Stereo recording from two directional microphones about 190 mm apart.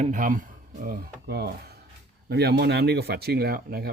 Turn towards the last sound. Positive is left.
turn(degrees=-55)  # may be behind; listen again after turning